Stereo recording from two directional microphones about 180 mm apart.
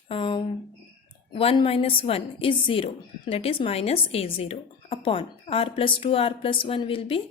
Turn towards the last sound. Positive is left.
turn(degrees=30)  # may be behind; listen again after turning